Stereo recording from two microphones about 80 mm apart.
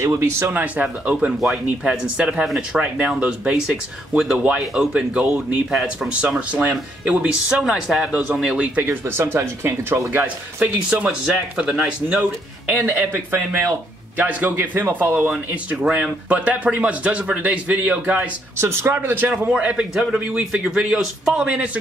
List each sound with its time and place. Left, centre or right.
0.0 s speech: right
1.4 s speech: centre
6.2 s speech: right
7.6 s speech: centre
9.0 s speech: right
11.1 s speech: centre
12.2 s speech: centre
18.6 s speech: right
19.5 s speech: centre
20.2 s speech: centre